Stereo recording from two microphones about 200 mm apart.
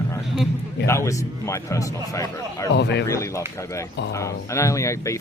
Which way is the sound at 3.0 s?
15° left (ahead or behind).